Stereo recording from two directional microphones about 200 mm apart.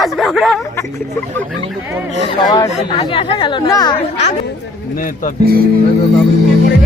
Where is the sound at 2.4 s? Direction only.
20° left (ahead or behind).